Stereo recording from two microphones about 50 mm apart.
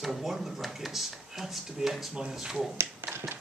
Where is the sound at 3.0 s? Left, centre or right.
Right.